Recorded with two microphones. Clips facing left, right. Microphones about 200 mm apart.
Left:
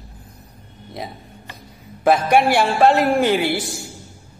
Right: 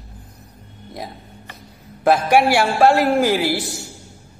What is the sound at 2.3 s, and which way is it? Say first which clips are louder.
A man's voice: even; 10° right (ahead or behind).